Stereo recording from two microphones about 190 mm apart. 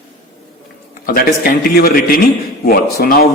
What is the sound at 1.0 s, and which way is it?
A man's voice, 50° left (ahead or behind).